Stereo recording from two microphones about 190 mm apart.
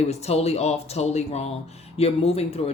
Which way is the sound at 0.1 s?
35° left (ahead or behind).